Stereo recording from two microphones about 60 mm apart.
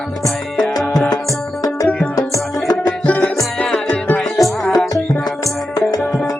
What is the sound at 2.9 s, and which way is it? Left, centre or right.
Music, left.